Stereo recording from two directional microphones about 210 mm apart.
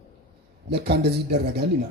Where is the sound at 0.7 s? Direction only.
50° right (ahead or behind).